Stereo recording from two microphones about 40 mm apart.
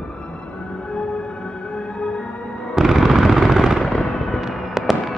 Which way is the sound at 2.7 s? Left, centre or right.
Centre.